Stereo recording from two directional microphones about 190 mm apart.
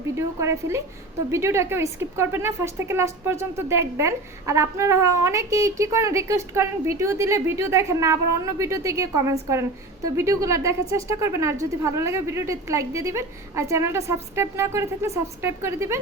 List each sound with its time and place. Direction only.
0.2 s a woman's voice: 15° right (ahead or behind)